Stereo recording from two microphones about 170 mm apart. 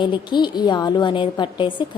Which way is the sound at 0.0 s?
25° left (ahead or behind).